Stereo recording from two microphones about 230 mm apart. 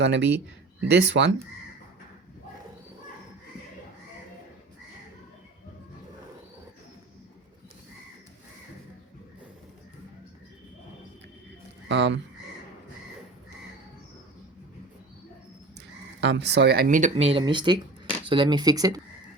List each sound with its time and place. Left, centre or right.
0.0 s speech: right
11.9 s speech: right
16.2 s speech: right; by 19.0 s centre